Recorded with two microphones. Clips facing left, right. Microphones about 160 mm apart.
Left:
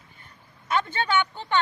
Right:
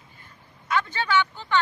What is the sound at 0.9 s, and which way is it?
Speech, 25° left (ahead or behind).